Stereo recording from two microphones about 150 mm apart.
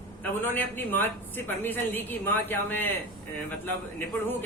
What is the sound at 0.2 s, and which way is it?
A man's voice, 15° left (ahead or behind).